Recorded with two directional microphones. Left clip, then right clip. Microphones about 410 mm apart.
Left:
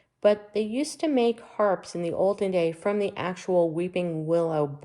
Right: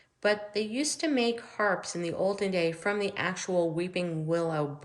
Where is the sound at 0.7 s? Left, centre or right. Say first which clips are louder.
Left 2 dB; left.